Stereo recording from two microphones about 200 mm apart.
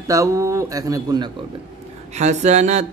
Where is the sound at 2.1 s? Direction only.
35° right (ahead or behind).